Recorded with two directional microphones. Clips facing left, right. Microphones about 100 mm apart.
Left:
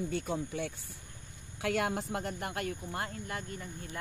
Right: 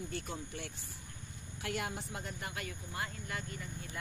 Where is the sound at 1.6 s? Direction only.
90° left; by 3.6 s 40° left (ahead or behind).